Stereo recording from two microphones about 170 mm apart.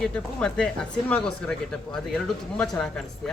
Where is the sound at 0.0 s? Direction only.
5° left (ahead or behind).